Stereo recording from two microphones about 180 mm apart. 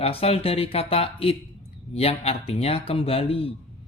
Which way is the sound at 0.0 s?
35° left (ahead or behind).